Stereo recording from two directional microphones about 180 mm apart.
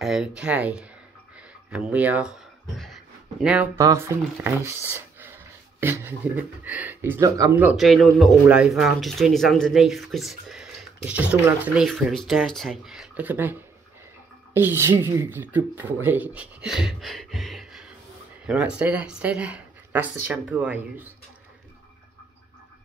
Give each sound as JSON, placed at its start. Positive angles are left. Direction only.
{"t": 0.0, "sound": "speech", "side_deg": -5}
{"t": 3.7, "sound": "speech", "side_deg": -15}
{"t": 7.5, "sound": "speech", "side_deg": -5}